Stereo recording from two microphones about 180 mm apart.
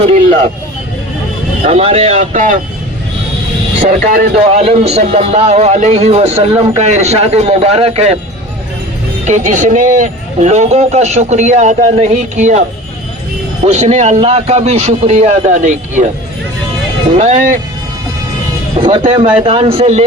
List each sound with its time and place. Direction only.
0.0 s speech: 35° right (ahead or behind)
1.6 s speech: 35° right (ahead or behind)
3.8 s speech: 50° right (ahead or behind)
4.5 s speech: 35° right (ahead or behind)
9.2 s speech: 40° right (ahead or behind)
13.7 s speech: 40° right (ahead or behind)
17.2 s speech: 45° right (ahead or behind)
18.8 s music: 25° right (ahead or behind)
19.1 s a man's voice: 30° right (ahead or behind)